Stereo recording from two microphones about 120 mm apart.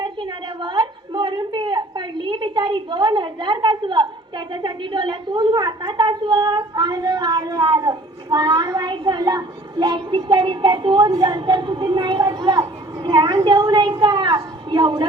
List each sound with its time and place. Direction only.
0.0 s a woman's voice: 40° right (ahead or behind)